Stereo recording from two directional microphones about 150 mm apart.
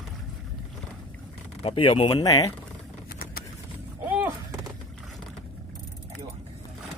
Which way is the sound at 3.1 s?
80° left.